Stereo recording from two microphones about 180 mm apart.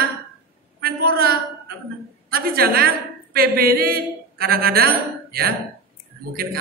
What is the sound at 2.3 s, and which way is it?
A woman's voice, 55° right (ahead or behind).